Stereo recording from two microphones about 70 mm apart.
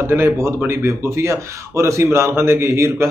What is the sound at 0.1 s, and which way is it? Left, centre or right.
Speech, right.